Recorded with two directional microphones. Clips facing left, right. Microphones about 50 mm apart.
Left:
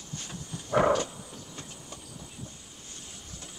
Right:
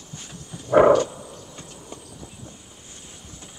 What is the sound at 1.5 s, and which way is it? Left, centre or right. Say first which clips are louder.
Train: right 4 dB; centre.